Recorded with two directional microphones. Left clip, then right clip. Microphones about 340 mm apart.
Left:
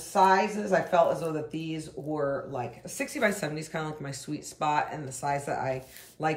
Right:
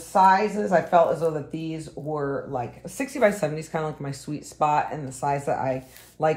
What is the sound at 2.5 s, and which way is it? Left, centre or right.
Speech, centre.